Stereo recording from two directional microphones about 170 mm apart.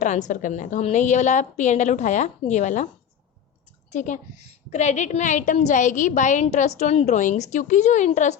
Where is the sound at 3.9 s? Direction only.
45° left (ahead or behind).